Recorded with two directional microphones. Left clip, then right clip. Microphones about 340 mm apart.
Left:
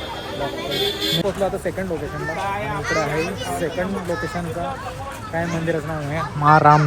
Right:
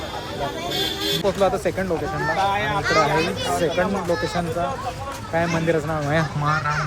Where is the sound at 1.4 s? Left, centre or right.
Centre.